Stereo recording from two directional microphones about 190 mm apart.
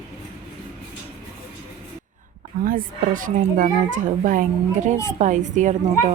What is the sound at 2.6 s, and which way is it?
Speech, 45° right (ahead or behind).